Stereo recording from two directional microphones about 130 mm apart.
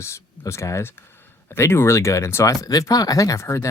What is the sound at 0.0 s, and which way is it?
Speech, 20° left (ahead or behind).